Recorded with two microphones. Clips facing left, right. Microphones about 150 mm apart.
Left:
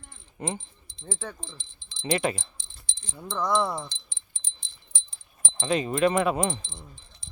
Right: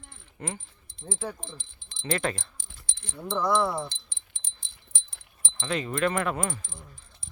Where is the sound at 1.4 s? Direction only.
50° right (ahead or behind).